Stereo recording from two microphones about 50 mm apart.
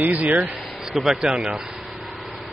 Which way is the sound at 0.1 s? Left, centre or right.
Centre.